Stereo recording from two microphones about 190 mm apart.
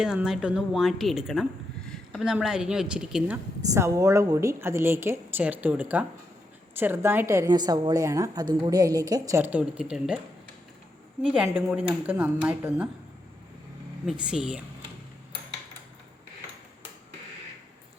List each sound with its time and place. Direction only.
0.0 s a woman's voice: 5° right (ahead or behind)
3.8 s a woman's voice: 15° right (ahead or behind)
11.2 s a woman's voice: 5° right (ahead or behind)
14.1 s a woman's voice: 5° right (ahead or behind)